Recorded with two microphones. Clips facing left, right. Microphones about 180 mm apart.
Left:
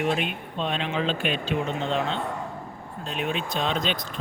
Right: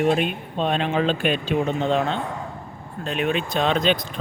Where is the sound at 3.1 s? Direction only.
70° right (ahead or behind).